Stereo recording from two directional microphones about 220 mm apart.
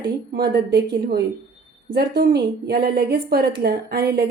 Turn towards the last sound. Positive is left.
turn(degrees=-45)  # may be behind; listen again after turning